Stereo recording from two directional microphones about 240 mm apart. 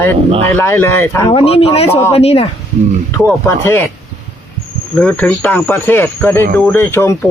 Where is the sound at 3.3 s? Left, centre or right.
Centre.